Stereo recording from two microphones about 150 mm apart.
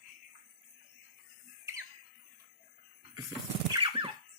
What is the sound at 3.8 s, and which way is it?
Squeal, 30° right (ahead or behind).